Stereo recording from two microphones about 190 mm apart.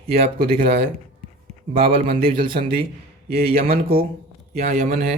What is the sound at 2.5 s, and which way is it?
Speech, 30° right (ahead or behind).